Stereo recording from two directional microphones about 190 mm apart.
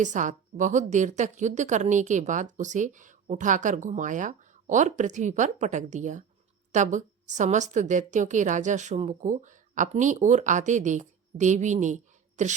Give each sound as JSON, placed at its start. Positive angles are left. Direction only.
{"t": 0.0, "sound": "a woman's voice", "side_deg": -40}